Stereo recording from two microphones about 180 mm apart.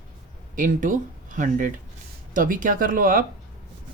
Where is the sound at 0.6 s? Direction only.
45° right (ahead or behind).